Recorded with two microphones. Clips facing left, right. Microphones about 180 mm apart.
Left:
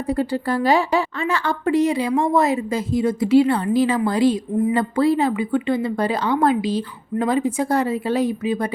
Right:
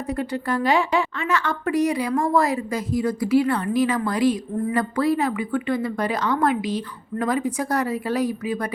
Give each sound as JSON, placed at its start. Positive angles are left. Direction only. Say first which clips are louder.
{"t": 0.1, "sound": "a woman's voice", "louder": "left 4 dB", "side_deg": 30}